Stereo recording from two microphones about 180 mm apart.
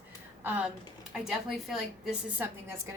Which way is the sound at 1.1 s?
Centre (ahead or behind).